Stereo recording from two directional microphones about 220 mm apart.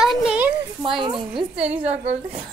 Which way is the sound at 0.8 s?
25° right (ahead or behind).